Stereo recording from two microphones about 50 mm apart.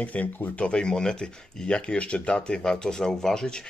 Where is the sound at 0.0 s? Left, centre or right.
Left.